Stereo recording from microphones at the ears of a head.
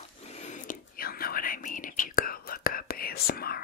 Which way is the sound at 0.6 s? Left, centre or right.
Left.